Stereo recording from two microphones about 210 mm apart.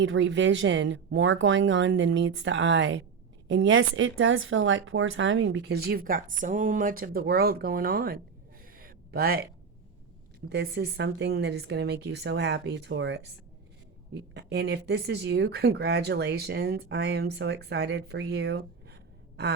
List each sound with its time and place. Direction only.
0.0 s speech: 60° right (ahead or behind); by 8.2 s 45° right (ahead or behind)
8.7 s a sound: 45° right (ahead or behind)
10.5 s speech: 55° right (ahead or behind)
14.3 s speech: 50° right (ahead or behind)